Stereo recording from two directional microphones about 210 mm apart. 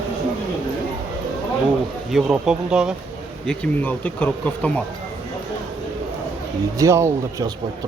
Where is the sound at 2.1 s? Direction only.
5° right (ahead or behind).